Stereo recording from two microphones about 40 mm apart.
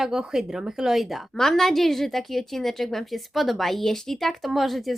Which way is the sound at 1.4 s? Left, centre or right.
Centre.